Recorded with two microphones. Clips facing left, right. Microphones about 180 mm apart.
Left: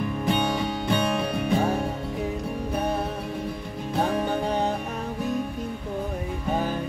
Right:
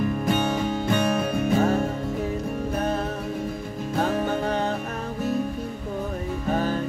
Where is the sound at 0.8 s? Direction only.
45° right (ahead or behind).